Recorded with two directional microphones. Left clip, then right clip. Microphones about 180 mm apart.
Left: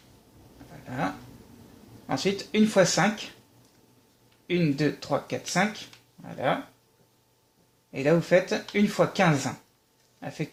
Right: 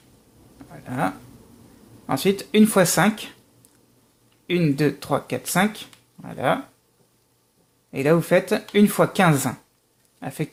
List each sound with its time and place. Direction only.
0.9 s speech: 55° right (ahead or behind)
4.4 s speech: 50° right (ahead or behind)
7.9 s speech: 50° right (ahead or behind)